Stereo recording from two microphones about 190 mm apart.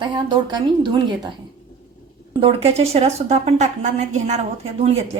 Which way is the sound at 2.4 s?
30° right (ahead or behind).